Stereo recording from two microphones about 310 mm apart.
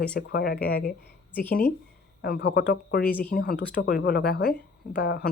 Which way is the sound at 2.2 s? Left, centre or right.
Left.